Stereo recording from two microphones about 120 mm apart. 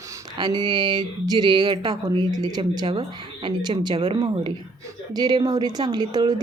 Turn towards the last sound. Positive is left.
turn(degrees=-35)  # may be behind; listen again after turning